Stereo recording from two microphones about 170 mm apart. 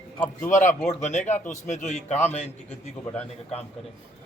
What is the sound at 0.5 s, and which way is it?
A man's voice, 45° left (ahead or behind).